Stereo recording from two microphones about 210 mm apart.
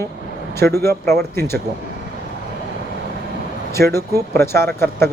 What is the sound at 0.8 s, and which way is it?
Speech, 10° left (ahead or behind).